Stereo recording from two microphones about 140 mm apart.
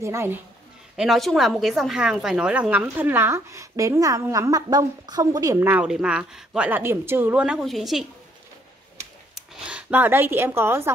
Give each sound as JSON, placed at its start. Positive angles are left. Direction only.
{"t": 0.0, "sound": "speech", "side_deg": -20}
{"t": 0.9, "sound": "a woman's voice", "side_deg": 0}
{"t": 9.3, "sound": "speech", "side_deg": -10}